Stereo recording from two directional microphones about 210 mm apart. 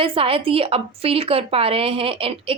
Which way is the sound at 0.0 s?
25° right (ahead or behind).